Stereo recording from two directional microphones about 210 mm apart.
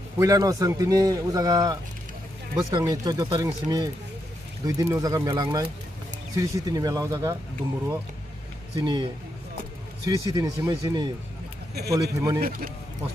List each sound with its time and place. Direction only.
0.2 s a man's voice: 15° right (ahead or behind)
8.7 s a man's voice: 20° right (ahead or behind)
12.4 s speech: 45° right (ahead or behind)